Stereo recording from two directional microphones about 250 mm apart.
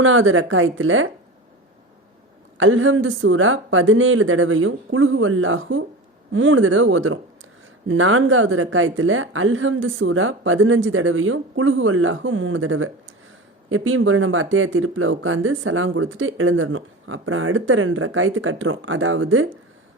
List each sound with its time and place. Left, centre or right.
0.0 s speech: right
2.6 s speech: right